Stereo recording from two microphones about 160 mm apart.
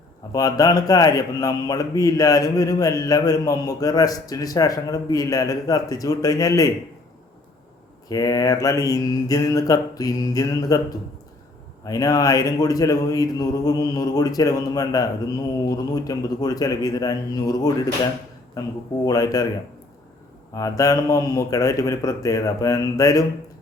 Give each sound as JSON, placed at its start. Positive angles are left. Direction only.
{"t": 0.3, "sound": "speech", "side_deg": 20}
{"t": 8.1, "sound": "speech", "side_deg": 20}
{"t": 11.9, "sound": "speech", "side_deg": 20}
{"t": 20.5, "sound": "speech", "side_deg": 20}